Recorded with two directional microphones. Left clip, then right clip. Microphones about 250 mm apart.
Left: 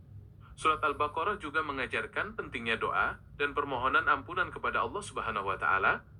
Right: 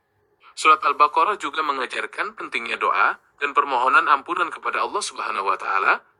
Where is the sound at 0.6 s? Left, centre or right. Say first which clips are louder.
Right 13 dB; right.